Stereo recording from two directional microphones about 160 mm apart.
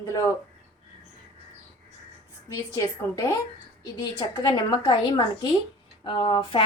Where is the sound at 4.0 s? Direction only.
20° left (ahead or behind).